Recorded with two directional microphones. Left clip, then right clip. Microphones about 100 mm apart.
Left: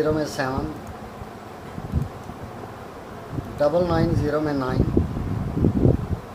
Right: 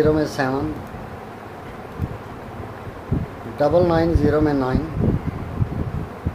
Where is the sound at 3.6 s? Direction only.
90° right.